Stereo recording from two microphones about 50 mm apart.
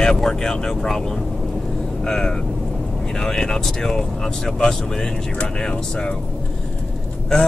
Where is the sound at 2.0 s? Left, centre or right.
Centre.